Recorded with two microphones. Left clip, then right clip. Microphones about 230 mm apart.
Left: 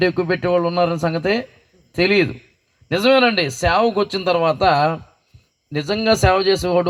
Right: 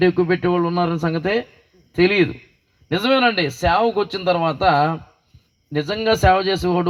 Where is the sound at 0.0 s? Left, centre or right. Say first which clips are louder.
Right 1 dB; left.